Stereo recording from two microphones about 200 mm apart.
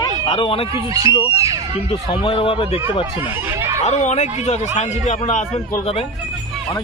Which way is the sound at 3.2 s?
10° right (ahead or behind).